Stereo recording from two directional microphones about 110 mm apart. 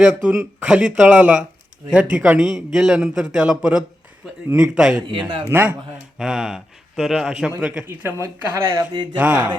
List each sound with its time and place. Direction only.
0.0 s a man's voice: 10° right (ahead or behind)
5.5 s a man's voice: 20° right (ahead or behind)
6.1 s speech: 5° right (ahead or behind)
8.4 s a man's voice: 20° right (ahead or behind)